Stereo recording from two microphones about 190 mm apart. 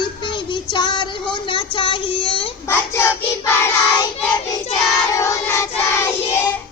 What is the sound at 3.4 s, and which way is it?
Speech, 15° left (ahead or behind).